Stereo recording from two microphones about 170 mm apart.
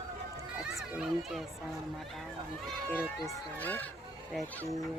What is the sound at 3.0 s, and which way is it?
Speech, 15° left (ahead or behind).